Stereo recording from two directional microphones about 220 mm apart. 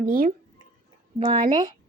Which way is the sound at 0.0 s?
40° right (ahead or behind).